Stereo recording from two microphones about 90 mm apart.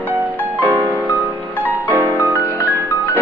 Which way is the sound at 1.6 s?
20° right (ahead or behind).